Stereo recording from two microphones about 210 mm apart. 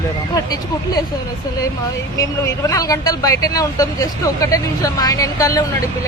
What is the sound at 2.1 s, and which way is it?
Speech, 15° left (ahead or behind).